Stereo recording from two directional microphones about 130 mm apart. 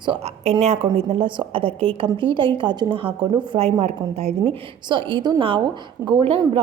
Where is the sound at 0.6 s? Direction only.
60° right (ahead or behind).